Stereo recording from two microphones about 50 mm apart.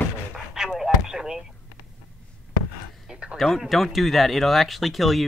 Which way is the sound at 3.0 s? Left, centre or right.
Centre.